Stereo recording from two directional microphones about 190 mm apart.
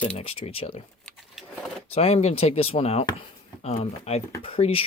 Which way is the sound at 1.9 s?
35° left (ahead or behind).